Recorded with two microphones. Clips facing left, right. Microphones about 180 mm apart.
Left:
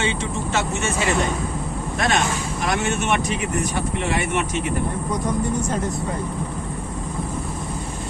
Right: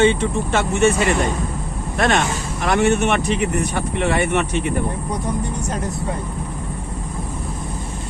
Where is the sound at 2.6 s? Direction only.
60° right (ahead or behind).